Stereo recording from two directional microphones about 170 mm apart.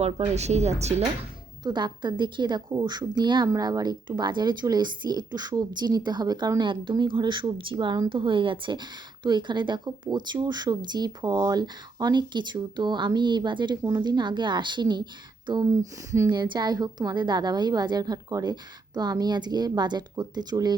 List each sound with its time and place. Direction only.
0.0 s speech: 40° right (ahead or behind)
1.6 s speech: 25° right (ahead or behind)